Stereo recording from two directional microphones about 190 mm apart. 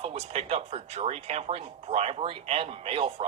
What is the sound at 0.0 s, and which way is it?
Speech, 30° right (ahead or behind).